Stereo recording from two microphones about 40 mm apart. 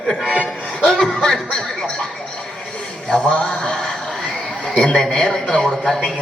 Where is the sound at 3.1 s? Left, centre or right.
Left.